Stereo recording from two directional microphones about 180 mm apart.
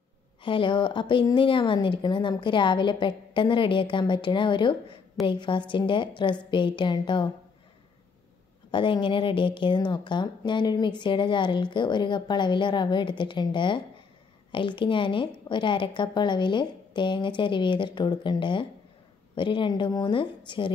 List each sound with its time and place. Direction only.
0.4 s a woman's voice: 30° left (ahead or behind)
8.7 s a woman's voice: 25° left (ahead or behind)